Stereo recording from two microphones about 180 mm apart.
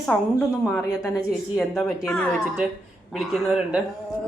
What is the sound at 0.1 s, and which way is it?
A woman's voice, 10° left (ahead or behind).